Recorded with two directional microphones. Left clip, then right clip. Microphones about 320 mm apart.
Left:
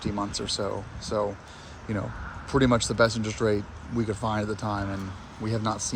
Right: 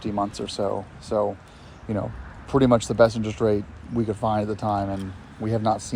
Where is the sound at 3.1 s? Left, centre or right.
Centre.